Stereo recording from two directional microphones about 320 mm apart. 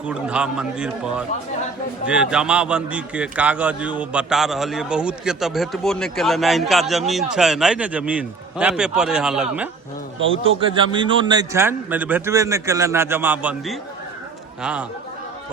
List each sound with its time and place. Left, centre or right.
0.0 s a man's voice: centre
10.2 s a man's voice: right
10.6 s a man's voice: centre